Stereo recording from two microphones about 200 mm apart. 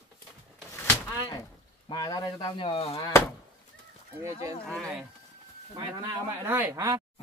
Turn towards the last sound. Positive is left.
turn(degrees=-10)  # may be behind; listen again after turning